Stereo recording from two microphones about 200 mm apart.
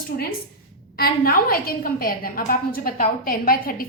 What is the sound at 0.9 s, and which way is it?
A woman's voice, 50° left (ahead or behind).